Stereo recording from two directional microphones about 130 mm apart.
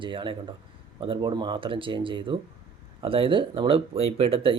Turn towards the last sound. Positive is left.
turn(degrees=-45)  # may be behind; listen again after turning